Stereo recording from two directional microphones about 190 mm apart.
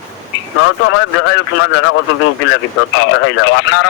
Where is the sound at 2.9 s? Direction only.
90° left.